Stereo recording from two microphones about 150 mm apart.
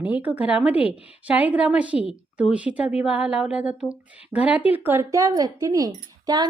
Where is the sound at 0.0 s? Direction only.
10° right (ahead or behind).